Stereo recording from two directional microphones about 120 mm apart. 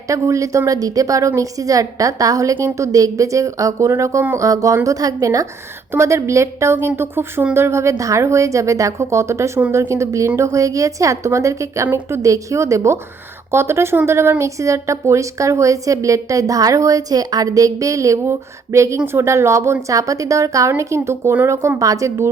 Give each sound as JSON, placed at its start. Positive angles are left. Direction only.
{"t": 0.1, "sound": "speech", "side_deg": -25}